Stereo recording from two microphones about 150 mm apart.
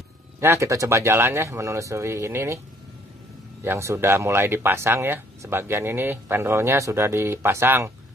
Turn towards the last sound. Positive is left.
turn(degrees=-15)  # may be behind; listen again after turning